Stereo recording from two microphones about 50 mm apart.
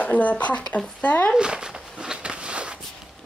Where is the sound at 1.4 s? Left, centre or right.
Centre.